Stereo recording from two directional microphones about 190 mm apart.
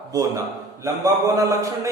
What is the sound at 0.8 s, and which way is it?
Speech, 15° right (ahead or behind).